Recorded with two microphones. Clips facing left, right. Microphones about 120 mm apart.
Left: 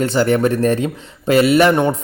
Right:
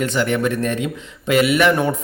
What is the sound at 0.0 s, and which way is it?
Speech, 35° left (ahead or behind).